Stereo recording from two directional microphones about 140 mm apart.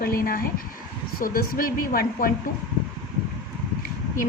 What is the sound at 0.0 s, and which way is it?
Speech, 90° left.